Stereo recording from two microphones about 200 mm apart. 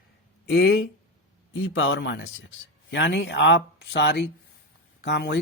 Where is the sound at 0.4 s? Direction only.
55° left (ahead or behind).